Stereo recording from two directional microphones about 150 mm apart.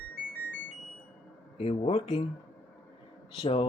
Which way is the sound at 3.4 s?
45° left (ahead or behind).